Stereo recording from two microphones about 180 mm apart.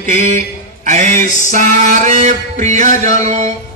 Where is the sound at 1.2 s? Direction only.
45° left (ahead or behind).